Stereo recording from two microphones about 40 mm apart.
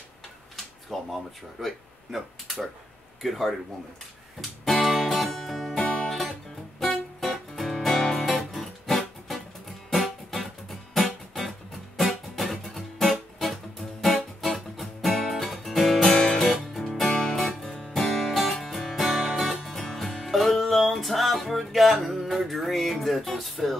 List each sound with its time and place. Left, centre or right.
0.9 s speech: centre
4.4 s music: centre
5.8 s music: left
6.0 s music: centre
16.0 s music: centre